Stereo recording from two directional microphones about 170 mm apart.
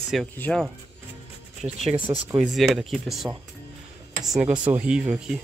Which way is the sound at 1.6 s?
20° right (ahead or behind).